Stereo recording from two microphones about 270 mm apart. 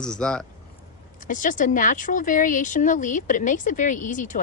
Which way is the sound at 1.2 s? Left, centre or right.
Left.